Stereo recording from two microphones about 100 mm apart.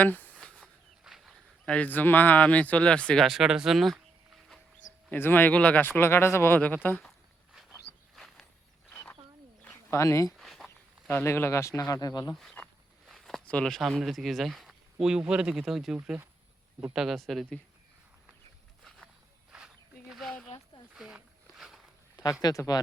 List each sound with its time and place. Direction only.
0.0 s speech: 15° left (ahead or behind)
0.3 s a sound: 10° left (ahead or behind)
1.0 s a man's voice: centre (ahead or behind)
3.2 s speech: 5° right (ahead or behind)
5.1 s speech: 20° left (ahead or behind)
8.1 s a sound: centre (ahead or behind)
9.9 s speech: 30° left (ahead or behind)
10.3 s walk: centre (ahead or behind)
11.1 s speech: 25° left (ahead or behind); by 12.3 s 40° left (ahead or behind)
12.3 s speech: 5° left (ahead or behind)
13.1 s a sound: centre (ahead or behind)
13.5 s speech: 10° left (ahead or behind)
19.5 s a sound: 5° right (ahead or behind)
22.1 s speech: 40° left (ahead or behind)